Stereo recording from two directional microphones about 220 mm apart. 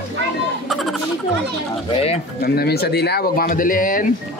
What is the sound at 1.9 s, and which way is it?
Speech, 25° left (ahead or behind).